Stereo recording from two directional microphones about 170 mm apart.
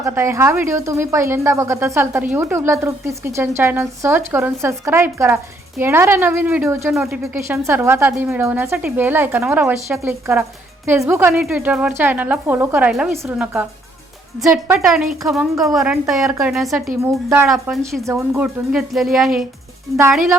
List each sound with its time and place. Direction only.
0.0 s speech: 15° right (ahead or behind)
6.9 s a woman's voice: 5° right (ahead or behind)
7.2 s a woman's voice: 15° right (ahead or behind)
13.2 s speech: 10° right (ahead or behind)
14.7 s a woman's voice: 5° right (ahead or behind)
17.0 s speech: 15° right (ahead or behind)
17.5 s a woman's voice: centre (ahead or behind)
18.0 s speech: 15° right (ahead or behind)
18.4 s a woman's voice: centre (ahead or behind)